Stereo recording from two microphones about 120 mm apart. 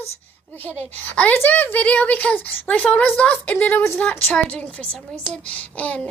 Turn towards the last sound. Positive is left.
turn(degrees=10)  # may be behind; listen again after turning